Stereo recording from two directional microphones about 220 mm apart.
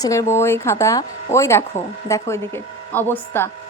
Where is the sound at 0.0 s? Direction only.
15° left (ahead or behind).